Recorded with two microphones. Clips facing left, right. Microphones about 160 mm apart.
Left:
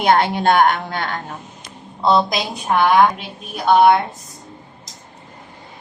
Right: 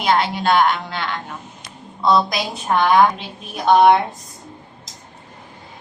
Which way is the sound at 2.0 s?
25° left (ahead or behind).